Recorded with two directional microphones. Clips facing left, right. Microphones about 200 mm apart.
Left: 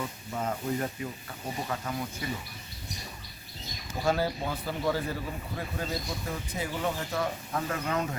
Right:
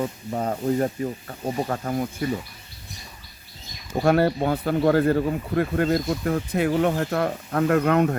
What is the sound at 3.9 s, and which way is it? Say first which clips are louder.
Speech: right 9 dB; 65° right (ahead or behind).